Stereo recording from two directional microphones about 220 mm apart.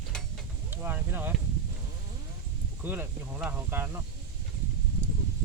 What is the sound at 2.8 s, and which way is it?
Speech, 10° right (ahead or behind).